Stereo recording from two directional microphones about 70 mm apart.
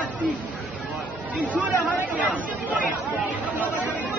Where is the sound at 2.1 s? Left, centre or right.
Right.